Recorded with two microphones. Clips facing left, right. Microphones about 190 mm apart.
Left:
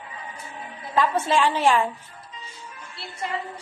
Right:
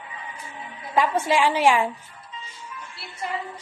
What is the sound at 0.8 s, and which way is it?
A woman's voice, 15° right (ahead or behind).